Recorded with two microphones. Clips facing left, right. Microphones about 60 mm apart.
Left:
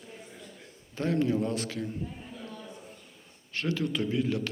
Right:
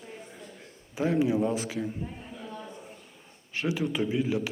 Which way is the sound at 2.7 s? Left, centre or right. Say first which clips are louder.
Right 2 dB; centre.